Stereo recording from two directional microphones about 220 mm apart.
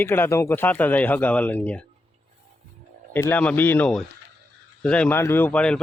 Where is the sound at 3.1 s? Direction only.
10° left (ahead or behind).